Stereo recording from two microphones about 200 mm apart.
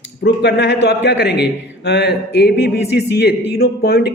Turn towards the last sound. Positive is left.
turn(degrees=50)  # may be behind; listen again after turning